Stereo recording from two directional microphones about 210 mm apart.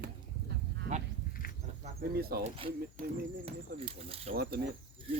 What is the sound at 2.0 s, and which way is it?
Speech, 50° right (ahead or behind).